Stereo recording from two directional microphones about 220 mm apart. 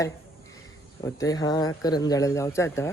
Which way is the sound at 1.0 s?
15° left (ahead or behind).